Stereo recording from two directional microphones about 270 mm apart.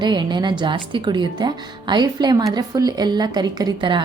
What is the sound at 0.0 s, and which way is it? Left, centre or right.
Speech, centre.